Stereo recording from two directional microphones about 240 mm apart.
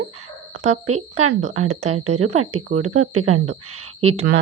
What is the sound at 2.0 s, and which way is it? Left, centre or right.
Speech, right.